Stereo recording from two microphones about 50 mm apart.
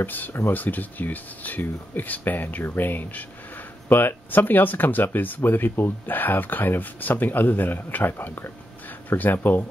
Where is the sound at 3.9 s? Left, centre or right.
Left.